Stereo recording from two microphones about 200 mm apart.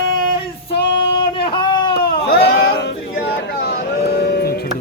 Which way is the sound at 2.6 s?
50° left (ahead or behind).